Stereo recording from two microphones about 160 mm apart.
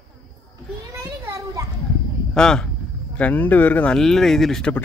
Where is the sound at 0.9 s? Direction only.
20° right (ahead or behind).